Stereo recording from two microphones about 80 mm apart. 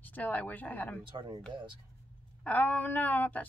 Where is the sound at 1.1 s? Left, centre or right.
Right.